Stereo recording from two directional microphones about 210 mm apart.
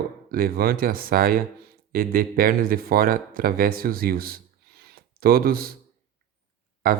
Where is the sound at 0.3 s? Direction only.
45° right (ahead or behind).